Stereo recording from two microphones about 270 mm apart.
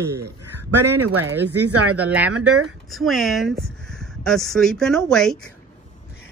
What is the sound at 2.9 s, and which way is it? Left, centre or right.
Speech, centre.